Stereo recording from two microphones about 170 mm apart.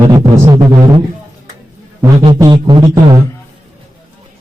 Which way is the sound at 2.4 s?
25° right (ahead or behind).